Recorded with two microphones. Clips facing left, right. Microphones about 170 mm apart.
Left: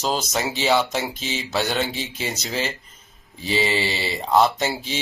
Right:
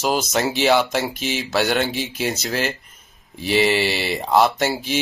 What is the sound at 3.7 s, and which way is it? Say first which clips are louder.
Speech: right 4 dB; 70° right (ahead or behind).